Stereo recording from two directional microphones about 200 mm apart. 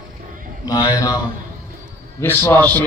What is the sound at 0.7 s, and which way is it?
Speech, 20° left (ahead or behind).